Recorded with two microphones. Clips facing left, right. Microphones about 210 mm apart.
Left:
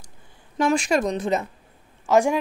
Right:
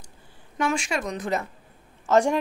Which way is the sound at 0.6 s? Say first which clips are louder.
Left 6 dB; 40° left (ahead or behind).